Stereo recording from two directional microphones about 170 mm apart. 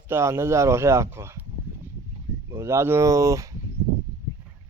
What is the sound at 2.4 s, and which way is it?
Speech, 15° right (ahead or behind).